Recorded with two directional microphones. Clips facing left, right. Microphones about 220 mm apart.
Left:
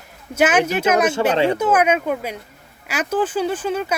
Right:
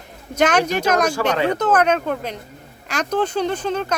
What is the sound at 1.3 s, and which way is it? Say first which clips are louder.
Speech: left 2 dB; 30° left (ahead or behind).